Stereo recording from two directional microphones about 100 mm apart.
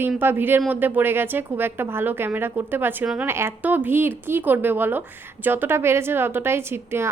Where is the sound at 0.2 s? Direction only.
20° right (ahead or behind).